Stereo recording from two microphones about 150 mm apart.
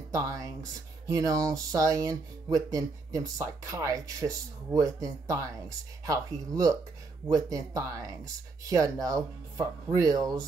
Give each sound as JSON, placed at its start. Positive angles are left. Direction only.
{"t": 0.1, "sound": "speech", "side_deg": -20}